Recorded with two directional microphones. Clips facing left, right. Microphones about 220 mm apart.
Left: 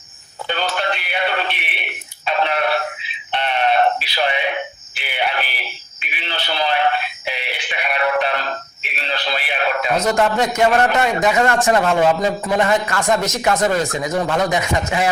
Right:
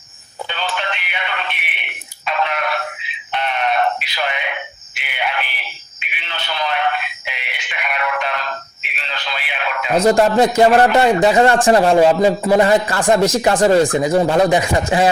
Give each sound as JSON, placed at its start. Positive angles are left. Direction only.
{"t": 0.4, "sound": "synthetic singing", "side_deg": 40}
{"t": 2.2, "sound": "a sound", "side_deg": 30}
{"t": 3.3, "sound": "synthetic singing", "side_deg": 30}
{"t": 4.9, "sound": "speech", "side_deg": 35}
{"t": 6.0, "sound": "synthetic singing", "side_deg": 35}
{"t": 9.0, "sound": "a sound", "side_deg": 35}
{"t": 10.0, "sound": "a man's voice", "side_deg": -30}